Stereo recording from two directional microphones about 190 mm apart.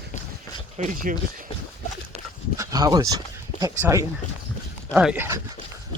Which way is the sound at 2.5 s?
20° right (ahead or behind).